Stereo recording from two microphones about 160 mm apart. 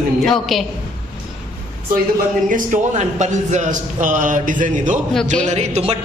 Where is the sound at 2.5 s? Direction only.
50° right (ahead or behind).